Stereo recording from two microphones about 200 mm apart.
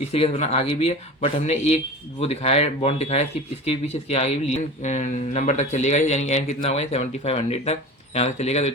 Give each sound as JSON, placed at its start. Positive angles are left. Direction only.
{"t": 0.1, "sound": "speech", "side_deg": 30}